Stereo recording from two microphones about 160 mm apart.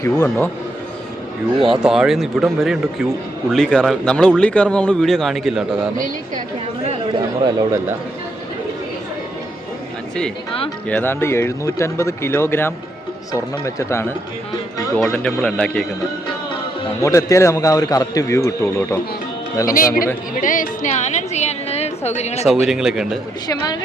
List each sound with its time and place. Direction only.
0.0 s a man's voice: 15° left (ahead or behind)
1.5 s speech: 35° right (ahead or behind)
1.8 s speech: 5° right (ahead or behind)
6.8 s speech: 35° right (ahead or behind)
10.8 s a man's voice: 10° left (ahead or behind)
17.0 s a man's voice: 20° left (ahead or behind)
19.7 s a woman's voice: 60° left (ahead or behind); by 22.4 s 45° left (ahead or behind)
22.6 s speech: 5° right (ahead or behind)